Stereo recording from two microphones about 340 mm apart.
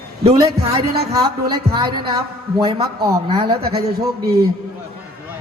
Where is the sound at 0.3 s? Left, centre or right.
Centre.